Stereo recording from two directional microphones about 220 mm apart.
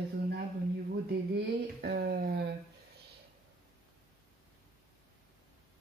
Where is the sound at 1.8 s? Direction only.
45° right (ahead or behind).